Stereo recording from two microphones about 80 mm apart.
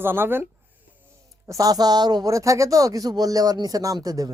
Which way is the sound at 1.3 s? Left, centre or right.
Right.